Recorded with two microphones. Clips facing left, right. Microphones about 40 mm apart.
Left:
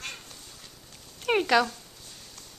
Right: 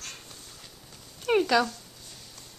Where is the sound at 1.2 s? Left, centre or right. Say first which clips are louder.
Even; left.